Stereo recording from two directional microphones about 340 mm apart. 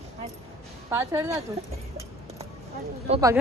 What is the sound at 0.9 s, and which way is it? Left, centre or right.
Speech, centre.